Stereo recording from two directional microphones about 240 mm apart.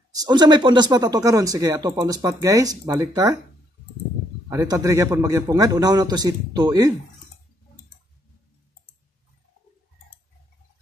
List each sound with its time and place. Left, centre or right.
0.1 s speech: centre
4.5 s speech: centre